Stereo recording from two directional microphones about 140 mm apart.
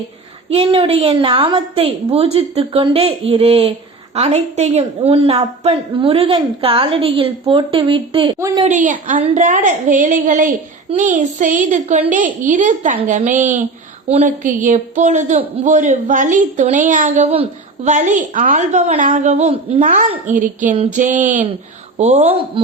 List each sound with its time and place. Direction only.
0.5 s a woman's voice: 40° right (ahead or behind)
8.4 s a woman's voice: 20° right (ahead or behind)
8.6 s a child's voice: 65° right (ahead or behind)
14.1 s a woman's voice: 50° right (ahead or behind)
14.4 s a child's voice: 65° right (ahead or behind)
17.2 s a woman's voice: 40° right (ahead or behind)
17.9 s a child's voice: 60° right (ahead or behind)
20.2 s a child's voice: 65° right (ahead or behind)
21.9 s a woman's voice: 55° right (ahead or behind)